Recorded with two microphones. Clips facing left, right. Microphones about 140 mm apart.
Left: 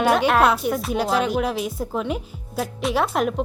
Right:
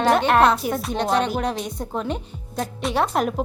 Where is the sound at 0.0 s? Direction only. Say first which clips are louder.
Right 1 dB; 5° left (ahead or behind).